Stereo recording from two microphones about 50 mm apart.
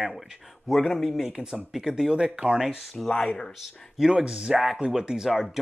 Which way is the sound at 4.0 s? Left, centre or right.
Centre.